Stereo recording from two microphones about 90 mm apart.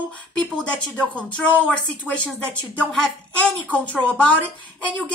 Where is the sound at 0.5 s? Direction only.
10° left (ahead or behind).